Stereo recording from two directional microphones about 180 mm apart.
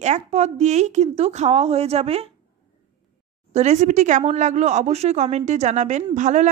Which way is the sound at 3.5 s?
40° right (ahead or behind).